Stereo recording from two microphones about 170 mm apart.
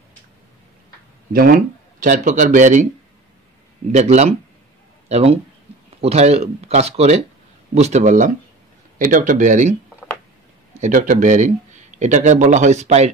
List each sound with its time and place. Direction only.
1.3 s speech: 60° right (ahead or behind)
2.0 s speech: 50° right (ahead or behind)
3.9 s speech: 40° right (ahead or behind)
10.8 s speech: 50° right (ahead or behind)